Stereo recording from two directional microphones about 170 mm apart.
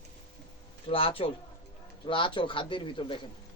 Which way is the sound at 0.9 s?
30° left (ahead or behind).